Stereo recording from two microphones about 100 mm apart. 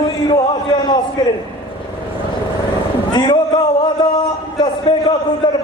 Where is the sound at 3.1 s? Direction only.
50° left (ahead or behind).